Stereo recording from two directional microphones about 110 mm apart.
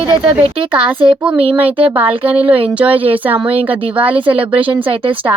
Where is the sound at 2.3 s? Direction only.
10° right (ahead or behind).